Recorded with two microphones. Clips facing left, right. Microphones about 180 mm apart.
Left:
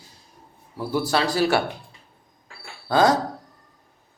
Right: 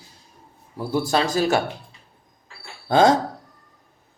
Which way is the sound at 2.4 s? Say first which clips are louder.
Right 3 dB; 25° right (ahead or behind).